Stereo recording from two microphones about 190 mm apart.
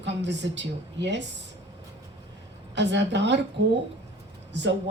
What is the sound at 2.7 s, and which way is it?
Speech, 65° right (ahead or behind).